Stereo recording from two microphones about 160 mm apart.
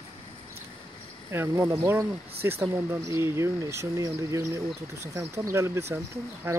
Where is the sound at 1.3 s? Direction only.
15° right (ahead or behind).